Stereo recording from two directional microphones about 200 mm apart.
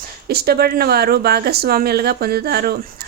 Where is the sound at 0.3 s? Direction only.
50° right (ahead or behind).